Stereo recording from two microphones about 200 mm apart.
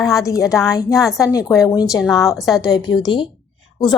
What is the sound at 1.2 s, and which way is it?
Speech, 15° left (ahead or behind).